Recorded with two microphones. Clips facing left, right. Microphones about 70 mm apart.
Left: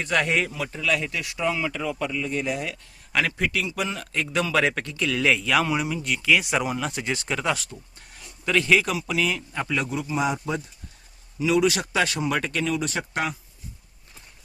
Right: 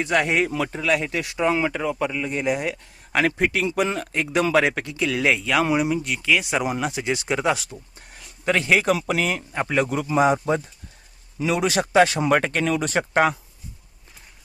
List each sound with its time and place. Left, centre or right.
0.0 s speech: centre
0.6 s speech: right
4.5 s speech: centre
5.4 s speech: centre
5.6 s speech: centre
6.0 s speech: centre
6.7 s speech: centre
6.9 s speech: centre
8.4 s speech: right
8.9 s speech: right
9.2 s speech: right
9.9 s speech: right
10.2 s speech: right
12.5 s speech: right